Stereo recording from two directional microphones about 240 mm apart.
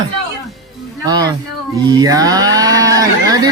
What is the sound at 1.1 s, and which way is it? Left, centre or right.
Speech, centre.